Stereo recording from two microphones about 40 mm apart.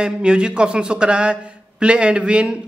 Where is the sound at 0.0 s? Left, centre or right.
Right.